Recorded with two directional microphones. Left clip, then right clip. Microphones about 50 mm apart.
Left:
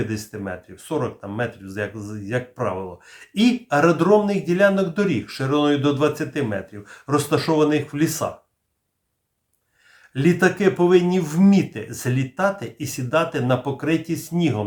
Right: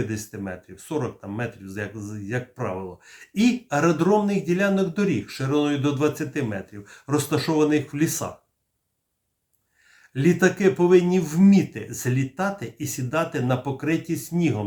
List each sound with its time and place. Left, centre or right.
0.0 s speech: left
10.2 s speech: left